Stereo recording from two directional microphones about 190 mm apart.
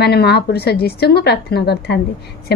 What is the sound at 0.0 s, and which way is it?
A woman's voice, 60° left (ahead or behind).